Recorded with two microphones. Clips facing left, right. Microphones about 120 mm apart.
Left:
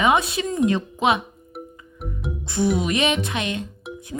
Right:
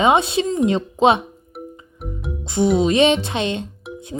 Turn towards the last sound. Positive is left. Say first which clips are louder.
# right 4 dB
turn(degrees=-25)  # may be behind; listen again after turning